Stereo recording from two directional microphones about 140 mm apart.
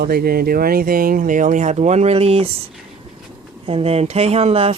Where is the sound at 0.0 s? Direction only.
90° right; by 2.5 s 45° right (ahead or behind).